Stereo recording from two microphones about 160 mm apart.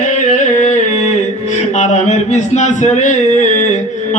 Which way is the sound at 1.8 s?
45° left (ahead or behind).